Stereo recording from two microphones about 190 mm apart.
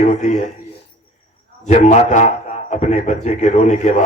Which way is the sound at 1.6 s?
40° left (ahead or behind).